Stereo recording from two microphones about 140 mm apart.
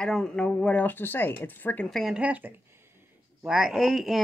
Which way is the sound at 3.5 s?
5° right (ahead or behind).